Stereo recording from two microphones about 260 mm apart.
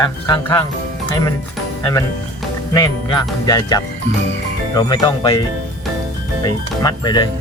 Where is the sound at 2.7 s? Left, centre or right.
Centre.